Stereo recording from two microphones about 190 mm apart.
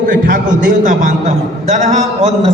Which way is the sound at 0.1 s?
45° right (ahead or behind).